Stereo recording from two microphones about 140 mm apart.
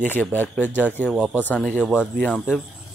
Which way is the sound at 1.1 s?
5° right (ahead or behind).